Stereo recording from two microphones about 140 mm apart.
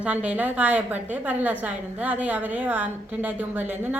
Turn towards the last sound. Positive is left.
turn(degrees=-15)  # may be behind; listen again after turning